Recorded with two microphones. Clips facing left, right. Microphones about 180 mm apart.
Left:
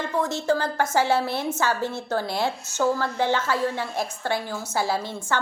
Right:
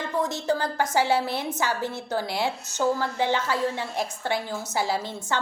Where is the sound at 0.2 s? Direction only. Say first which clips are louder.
Left 2 dB; 20° right (ahead or behind).